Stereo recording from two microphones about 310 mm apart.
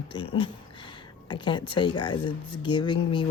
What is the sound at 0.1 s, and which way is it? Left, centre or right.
A woman's voice, centre.